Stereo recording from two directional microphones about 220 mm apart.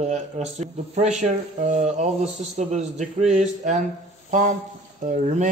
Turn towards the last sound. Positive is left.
turn(degrees=-35)  # may be behind; listen again after turning